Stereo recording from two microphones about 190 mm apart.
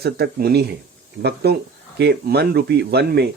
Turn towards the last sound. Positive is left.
turn(degrees=-60)  # may be behind; listen again after turning